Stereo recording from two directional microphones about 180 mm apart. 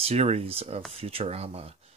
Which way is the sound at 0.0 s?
35° right (ahead or behind).